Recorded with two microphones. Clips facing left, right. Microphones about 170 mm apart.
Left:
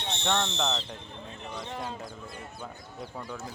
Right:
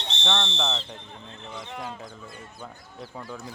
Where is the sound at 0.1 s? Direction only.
50° left (ahead or behind).